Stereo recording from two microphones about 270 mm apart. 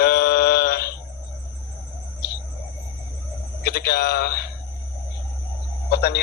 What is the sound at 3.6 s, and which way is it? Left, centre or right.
Speech, left.